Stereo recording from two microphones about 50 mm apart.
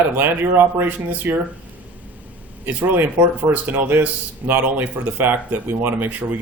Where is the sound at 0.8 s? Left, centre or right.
Right.